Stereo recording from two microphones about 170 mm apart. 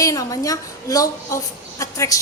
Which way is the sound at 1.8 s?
20° left (ahead or behind).